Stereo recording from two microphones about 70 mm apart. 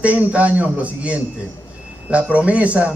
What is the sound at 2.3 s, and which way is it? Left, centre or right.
Speech, centre.